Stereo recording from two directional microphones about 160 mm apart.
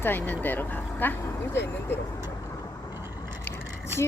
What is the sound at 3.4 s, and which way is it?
Vehicle, 15° left (ahead or behind).